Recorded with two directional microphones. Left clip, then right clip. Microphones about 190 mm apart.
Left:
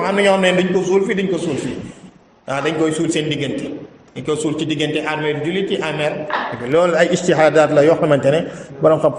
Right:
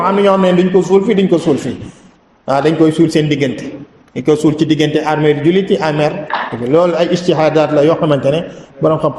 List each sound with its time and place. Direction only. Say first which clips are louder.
0.0 s a man's voice: right 4 dB; 15° right (ahead or behind)
2.5 s a man's voice: right 7 dB; 25° right (ahead or behind)
6.7 s a man's voice: right 3 dB; 15° right (ahead or behind)